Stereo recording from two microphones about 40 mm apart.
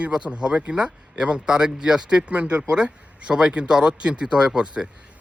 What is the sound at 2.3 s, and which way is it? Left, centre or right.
Speech, right.